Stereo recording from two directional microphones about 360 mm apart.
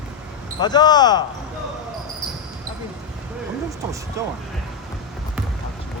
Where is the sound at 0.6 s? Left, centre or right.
Centre.